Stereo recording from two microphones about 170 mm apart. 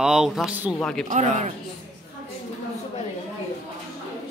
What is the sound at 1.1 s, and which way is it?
Speech, 45° right (ahead or behind).